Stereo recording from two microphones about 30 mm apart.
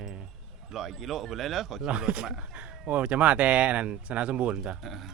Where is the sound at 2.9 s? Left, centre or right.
Right.